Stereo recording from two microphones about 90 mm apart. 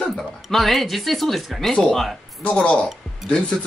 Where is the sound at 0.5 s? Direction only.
Centre (ahead or behind).